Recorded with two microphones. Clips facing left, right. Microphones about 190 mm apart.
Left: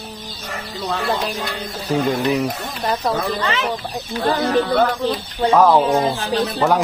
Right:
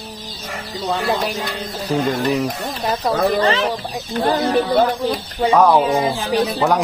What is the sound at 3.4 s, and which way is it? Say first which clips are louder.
Speech: right 4 dB; 35° right (ahead or behind).